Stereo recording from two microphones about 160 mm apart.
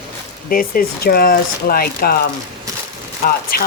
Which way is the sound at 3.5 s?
70° left (ahead or behind).